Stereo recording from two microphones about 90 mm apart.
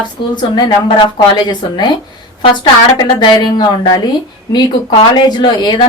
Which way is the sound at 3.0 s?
60° left (ahead or behind).